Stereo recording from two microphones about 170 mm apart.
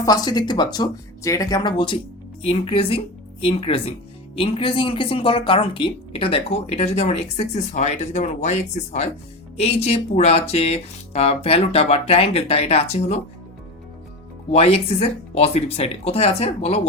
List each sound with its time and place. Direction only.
0.0 s speech: 20° left (ahead or behind); by 13.2 s 40° left (ahead or behind)
14.5 s speech: 35° left (ahead or behind)